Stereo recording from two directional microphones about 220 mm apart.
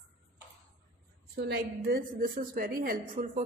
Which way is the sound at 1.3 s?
45° right (ahead or behind).